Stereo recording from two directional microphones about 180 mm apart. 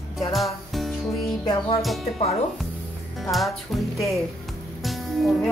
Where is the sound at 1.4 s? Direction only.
25° left (ahead or behind).